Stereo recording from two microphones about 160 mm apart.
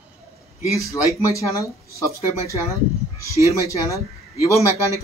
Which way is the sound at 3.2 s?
20° right (ahead or behind).